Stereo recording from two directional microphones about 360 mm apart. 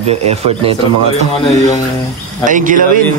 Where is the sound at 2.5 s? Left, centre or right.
Right.